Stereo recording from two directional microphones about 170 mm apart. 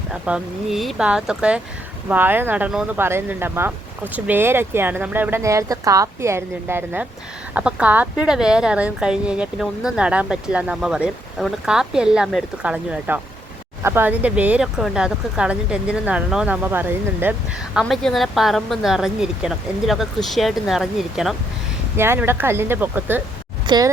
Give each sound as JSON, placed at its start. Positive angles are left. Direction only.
{"t": 0.1, "sound": "speech", "side_deg": -5}
{"t": 17.7, "sound": "speech", "side_deg": 0}
{"t": 21.9, "sound": "speech", "side_deg": -15}
{"t": 23.6, "sound": "speech", "side_deg": -25}